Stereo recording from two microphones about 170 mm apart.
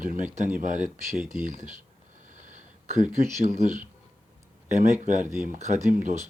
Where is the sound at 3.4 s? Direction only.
45° right (ahead or behind).